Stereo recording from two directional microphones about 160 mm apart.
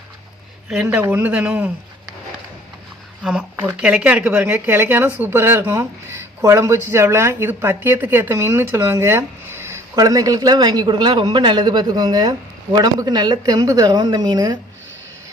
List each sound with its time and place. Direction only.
0.7 s speech: 10° right (ahead or behind)
3.5 s a woman's voice: 10° right (ahead or behind)